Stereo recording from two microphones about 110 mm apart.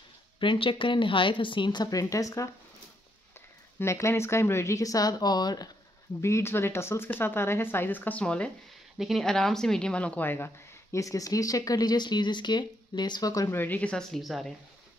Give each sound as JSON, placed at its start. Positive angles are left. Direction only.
{"t": 0.4, "sound": "speech", "side_deg": 50}
{"t": 3.8, "sound": "speech", "side_deg": 25}
{"t": 6.2, "sound": "speech", "side_deg": 25}
{"t": 8.9, "sound": "a woman's voice", "side_deg": 0}
{"t": 13.6, "sound": "speech", "side_deg": 15}